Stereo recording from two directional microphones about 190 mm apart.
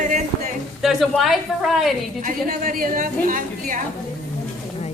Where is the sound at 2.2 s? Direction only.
40° right (ahead or behind).